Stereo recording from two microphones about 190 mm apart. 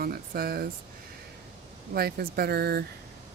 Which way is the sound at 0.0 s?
55° right (ahead or behind).